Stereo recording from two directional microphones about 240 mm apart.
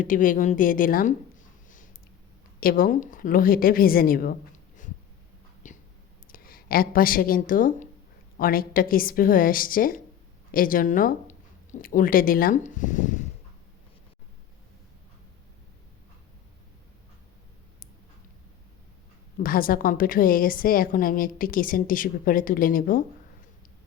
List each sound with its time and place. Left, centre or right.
0.0 s a woman's voice: left
2.6 s a woman's voice: left
5.6 s whispering: left
6.3 s a woman's voice: left
19.4 s a woman's voice: left